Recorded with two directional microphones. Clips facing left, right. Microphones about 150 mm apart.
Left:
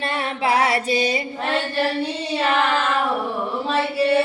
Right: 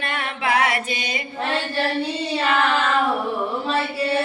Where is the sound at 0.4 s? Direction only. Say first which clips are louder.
Left 2 dB; 35° left (ahead or behind).